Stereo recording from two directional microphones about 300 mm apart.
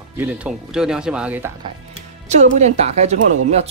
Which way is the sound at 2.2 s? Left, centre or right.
Right.